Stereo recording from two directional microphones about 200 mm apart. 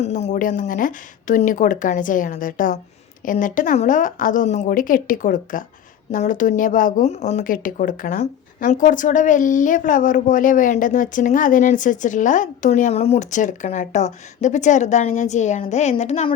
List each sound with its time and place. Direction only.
0.0 s a woman's voice: 35° left (ahead or behind)